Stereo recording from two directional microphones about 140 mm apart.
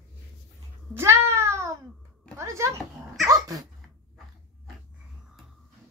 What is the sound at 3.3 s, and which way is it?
Dog, 25° right (ahead or behind).